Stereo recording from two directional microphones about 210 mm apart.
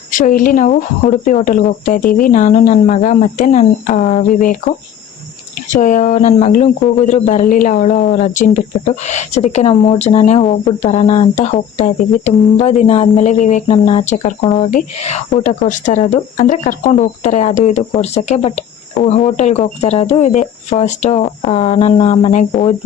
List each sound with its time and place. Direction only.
0.1 s speech: 40° left (ahead or behind)
5.7 s speech: 35° left (ahead or behind)